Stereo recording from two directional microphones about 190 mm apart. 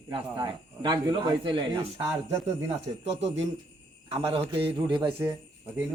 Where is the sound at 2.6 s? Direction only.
35° right (ahead or behind).